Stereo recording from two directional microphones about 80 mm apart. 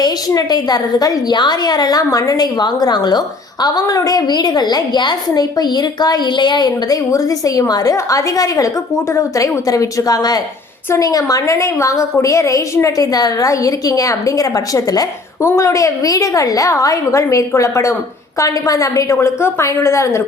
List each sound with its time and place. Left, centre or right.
0.3 s a woman's voice: left